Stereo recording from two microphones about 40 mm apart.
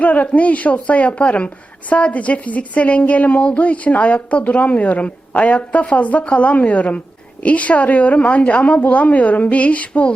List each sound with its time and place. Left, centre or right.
0.0 s a woman's voice: left